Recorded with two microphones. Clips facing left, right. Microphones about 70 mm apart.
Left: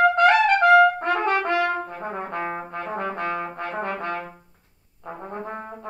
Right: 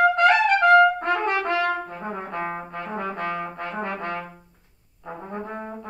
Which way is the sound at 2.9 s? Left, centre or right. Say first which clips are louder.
Left 1 dB; left.